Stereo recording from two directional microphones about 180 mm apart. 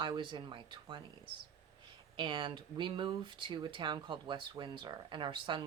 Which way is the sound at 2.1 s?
25° right (ahead or behind).